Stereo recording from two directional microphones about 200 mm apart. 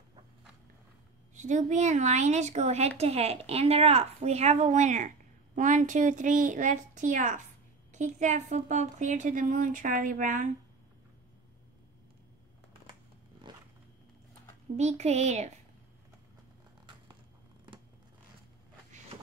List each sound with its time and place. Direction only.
1.3 s a woman's voice: 35° right (ahead or behind)
13.5 s roaring cats: 20° right (ahead or behind)
14.8 s a woman's voice: 35° right (ahead or behind)